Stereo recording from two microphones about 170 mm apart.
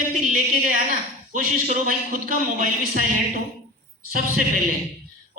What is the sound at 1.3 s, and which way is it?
Speech, 50° right (ahead or behind).